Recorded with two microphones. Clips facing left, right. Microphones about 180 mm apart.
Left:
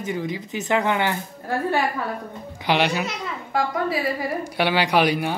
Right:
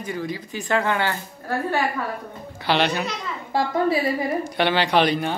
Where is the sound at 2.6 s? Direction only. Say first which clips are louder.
Even; 10° left (ahead or behind).